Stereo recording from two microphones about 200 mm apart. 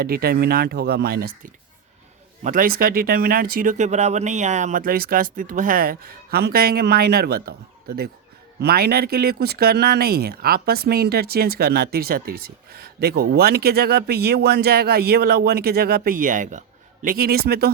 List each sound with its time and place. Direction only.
0.0 s speech: 50° right (ahead or behind)
2.4 s speech: 45° right (ahead or behind)